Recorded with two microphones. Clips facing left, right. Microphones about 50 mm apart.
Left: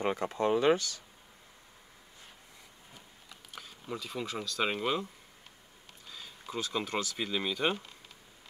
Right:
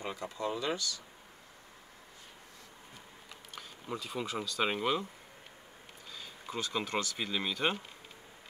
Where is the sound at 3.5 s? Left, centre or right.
Centre.